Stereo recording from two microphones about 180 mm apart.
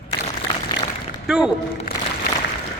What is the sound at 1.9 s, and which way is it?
Music, 50° left (ahead or behind).